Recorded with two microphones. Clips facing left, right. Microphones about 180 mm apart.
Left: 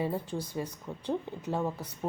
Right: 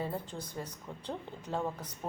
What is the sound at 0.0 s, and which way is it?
A woman's voice, 15° left (ahead or behind).